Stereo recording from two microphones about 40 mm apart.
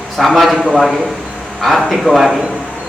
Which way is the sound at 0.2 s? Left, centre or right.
Centre.